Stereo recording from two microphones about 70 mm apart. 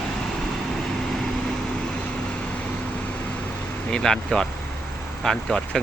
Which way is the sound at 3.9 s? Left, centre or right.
Centre.